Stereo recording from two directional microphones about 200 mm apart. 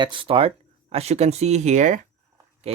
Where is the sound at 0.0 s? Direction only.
25° right (ahead or behind).